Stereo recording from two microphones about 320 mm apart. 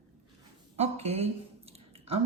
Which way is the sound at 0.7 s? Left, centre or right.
Centre.